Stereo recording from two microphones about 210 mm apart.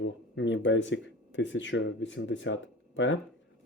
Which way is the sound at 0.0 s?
60° left (ahead or behind).